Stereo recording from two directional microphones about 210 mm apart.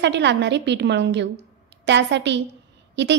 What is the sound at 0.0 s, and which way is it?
A woman's voice, 55° right (ahead or behind).